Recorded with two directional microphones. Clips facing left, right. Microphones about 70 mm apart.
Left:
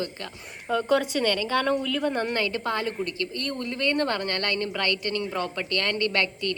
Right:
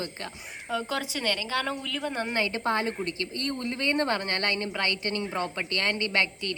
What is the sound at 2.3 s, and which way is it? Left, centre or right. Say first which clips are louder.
Speech: even; right.